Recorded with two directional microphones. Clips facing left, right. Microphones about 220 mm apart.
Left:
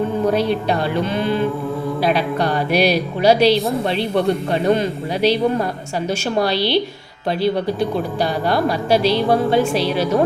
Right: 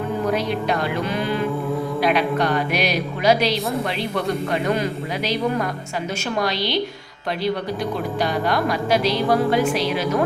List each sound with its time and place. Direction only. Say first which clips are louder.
0.3 s a man's voice: left 3 dB; 30° left (ahead or behind)